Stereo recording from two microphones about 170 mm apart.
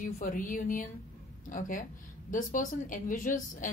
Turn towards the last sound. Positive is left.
turn(degrees=50)  # may be behind; listen again after turning